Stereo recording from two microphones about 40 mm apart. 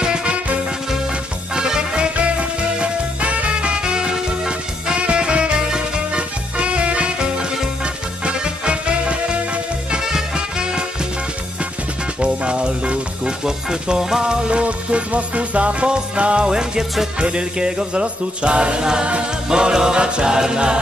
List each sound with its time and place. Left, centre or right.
0.0 s music: right
1.5 s music: centre
2.8 s music: right
12.2 s music: right
13.4 s music: centre